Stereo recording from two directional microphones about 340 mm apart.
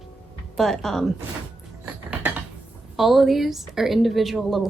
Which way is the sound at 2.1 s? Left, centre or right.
Centre.